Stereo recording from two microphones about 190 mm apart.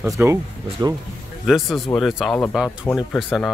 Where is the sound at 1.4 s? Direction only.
Centre (ahead or behind).